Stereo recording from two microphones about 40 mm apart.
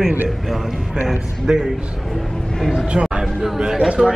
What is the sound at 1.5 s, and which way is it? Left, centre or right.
Speech, centre.